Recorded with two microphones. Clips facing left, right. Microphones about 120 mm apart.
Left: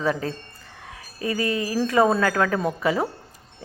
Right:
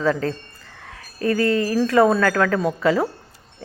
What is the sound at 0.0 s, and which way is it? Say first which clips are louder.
A woman's voice: right 4 dB; 15° left (ahead or behind).